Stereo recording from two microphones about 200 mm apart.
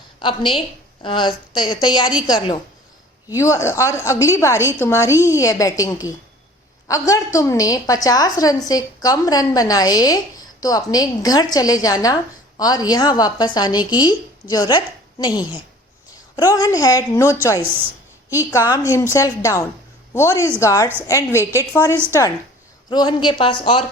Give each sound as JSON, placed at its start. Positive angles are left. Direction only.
{"t": 0.2, "sound": "a woman's voice", "side_deg": 25}
{"t": 18.3, "sound": "a woman's voice", "side_deg": 15}